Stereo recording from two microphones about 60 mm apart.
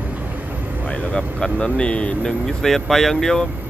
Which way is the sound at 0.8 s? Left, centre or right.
Centre.